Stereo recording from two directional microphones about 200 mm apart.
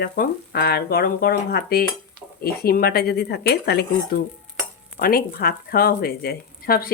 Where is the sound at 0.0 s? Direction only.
50° left (ahead or behind).